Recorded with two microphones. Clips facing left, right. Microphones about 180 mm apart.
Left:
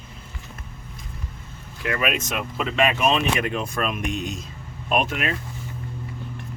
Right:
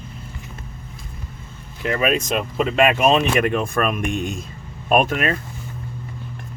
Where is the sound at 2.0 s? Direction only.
35° right (ahead or behind).